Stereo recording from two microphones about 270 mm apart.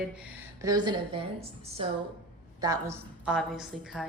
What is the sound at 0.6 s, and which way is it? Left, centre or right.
A woman's voice, centre.